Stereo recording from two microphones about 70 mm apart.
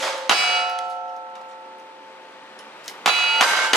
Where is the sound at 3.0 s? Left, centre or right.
Centre.